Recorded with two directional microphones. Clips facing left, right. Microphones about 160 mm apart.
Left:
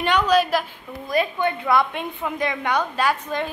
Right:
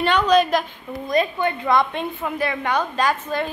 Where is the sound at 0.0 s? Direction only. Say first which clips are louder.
Right 2 dB; 10° left (ahead or behind).